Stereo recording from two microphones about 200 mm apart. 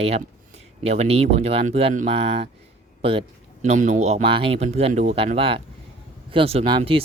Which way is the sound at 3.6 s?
35° right (ahead or behind).